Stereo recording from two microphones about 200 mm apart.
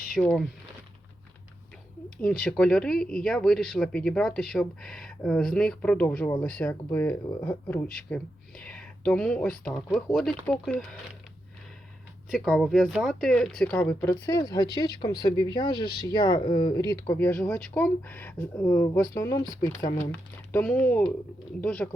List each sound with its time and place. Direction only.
0.2 s speech: 5° left (ahead or behind)
2.0 s speech: 5° left (ahead or behind)
12.3 s speech: centre (ahead or behind)
14.3 s speech: 20° left (ahead or behind); by 21.8 s 5° left (ahead or behind)